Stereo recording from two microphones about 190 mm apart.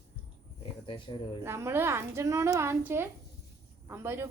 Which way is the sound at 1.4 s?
15° right (ahead or behind).